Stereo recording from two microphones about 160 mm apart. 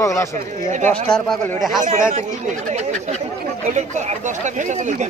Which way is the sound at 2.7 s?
45° right (ahead or behind).